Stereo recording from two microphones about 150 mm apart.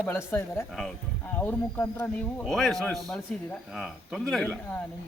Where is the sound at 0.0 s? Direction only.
15° left (ahead or behind).